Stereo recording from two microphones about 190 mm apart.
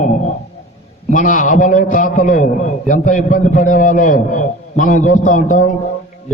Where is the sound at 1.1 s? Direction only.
45° left (ahead or behind).